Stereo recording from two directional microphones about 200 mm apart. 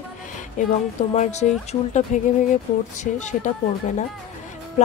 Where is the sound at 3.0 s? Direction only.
35° left (ahead or behind).